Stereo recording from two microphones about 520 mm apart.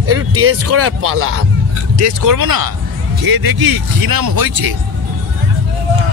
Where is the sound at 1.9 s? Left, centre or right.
Right.